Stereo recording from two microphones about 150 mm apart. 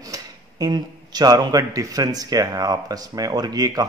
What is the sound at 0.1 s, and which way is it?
A man's voice, 25° right (ahead or behind).